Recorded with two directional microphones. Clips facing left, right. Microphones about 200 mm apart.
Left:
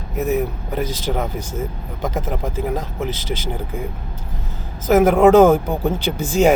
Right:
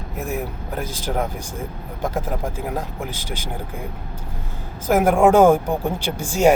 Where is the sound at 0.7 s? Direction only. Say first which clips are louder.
Left 3 dB; 10° right (ahead or behind).